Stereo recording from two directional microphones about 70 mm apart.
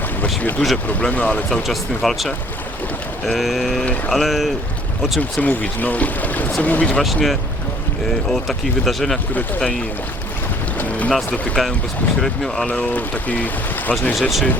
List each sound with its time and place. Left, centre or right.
0.6 s speech: centre
1.6 s speech: centre
5.4 s speech: left
7.0 s speech: centre
10.8 s boat: left
11.3 s speech: centre
12.2 s speech: centre
12.6 s speech: centre
14.2 s speech: centre